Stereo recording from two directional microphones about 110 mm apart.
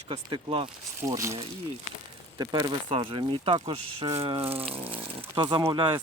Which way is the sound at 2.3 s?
40° right (ahead or behind).